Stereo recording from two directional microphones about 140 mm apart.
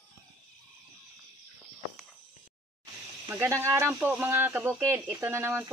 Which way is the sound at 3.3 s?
20° right (ahead or behind).